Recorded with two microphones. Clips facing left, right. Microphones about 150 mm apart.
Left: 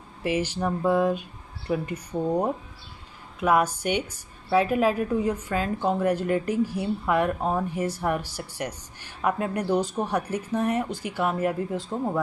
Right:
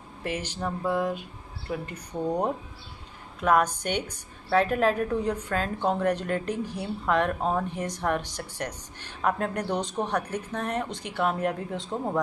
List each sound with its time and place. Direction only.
0.2 s a woman's voice: 10° left (ahead or behind)
0.8 s speech: 20° left (ahead or behind)
1.7 s a woman's voice: 10° left (ahead or behind)